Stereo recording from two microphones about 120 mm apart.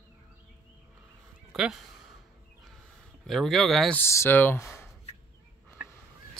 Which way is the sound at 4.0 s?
20° left (ahead or behind).